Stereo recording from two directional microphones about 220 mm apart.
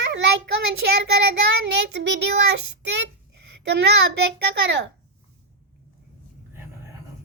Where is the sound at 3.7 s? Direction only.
50° right (ahead or behind).